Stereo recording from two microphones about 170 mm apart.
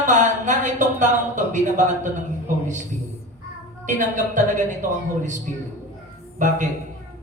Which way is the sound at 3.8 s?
50° right (ahead or behind).